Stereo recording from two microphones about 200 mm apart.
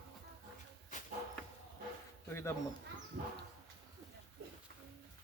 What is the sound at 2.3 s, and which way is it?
Speech, 10° left (ahead or behind).